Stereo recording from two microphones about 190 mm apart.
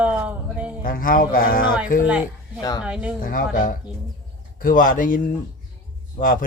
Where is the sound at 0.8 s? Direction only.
50° left (ahead or behind).